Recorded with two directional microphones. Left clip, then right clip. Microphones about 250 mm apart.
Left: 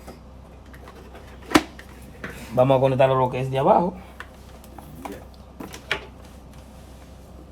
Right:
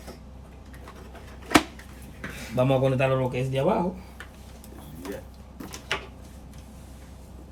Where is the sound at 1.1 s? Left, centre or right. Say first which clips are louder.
Left 1 dB; centre.